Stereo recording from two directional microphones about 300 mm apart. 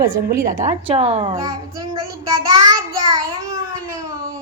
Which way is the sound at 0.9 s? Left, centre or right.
Right.